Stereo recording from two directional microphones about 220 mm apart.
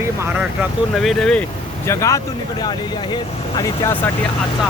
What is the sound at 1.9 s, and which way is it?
Speech, 15° left (ahead or behind).